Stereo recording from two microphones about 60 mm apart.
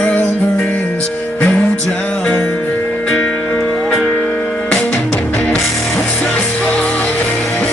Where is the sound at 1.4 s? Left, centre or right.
Centre.